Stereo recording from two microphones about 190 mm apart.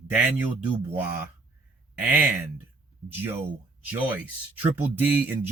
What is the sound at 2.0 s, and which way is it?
Speech, 10° right (ahead or behind).